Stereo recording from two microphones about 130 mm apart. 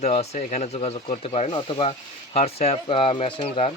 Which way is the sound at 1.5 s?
40° left (ahead or behind).